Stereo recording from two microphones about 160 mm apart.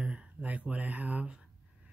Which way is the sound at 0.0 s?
5° right (ahead or behind).